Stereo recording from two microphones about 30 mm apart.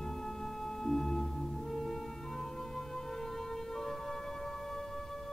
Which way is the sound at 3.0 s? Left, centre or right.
Centre.